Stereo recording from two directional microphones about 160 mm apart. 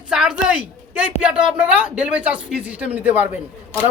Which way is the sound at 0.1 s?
5° right (ahead or behind).